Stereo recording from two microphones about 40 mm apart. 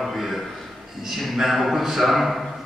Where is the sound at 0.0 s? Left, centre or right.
Centre.